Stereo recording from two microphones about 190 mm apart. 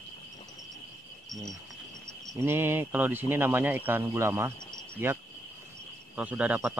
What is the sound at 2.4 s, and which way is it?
Speech, 10° right (ahead or behind).